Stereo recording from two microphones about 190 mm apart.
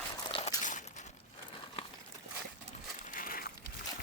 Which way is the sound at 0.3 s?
30° left (ahead or behind).